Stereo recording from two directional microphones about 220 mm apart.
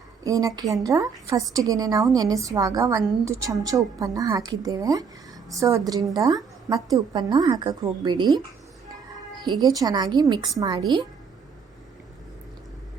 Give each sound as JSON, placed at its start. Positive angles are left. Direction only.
{"t": 0.3, "sound": "a woman's voice", "side_deg": -15}
{"t": 9.4, "sound": "a woman's voice", "side_deg": -20}